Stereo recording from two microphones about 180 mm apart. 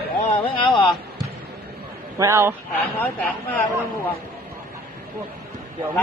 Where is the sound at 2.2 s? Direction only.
15° right (ahead or behind).